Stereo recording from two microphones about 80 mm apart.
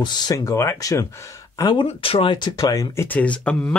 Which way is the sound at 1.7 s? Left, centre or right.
Left.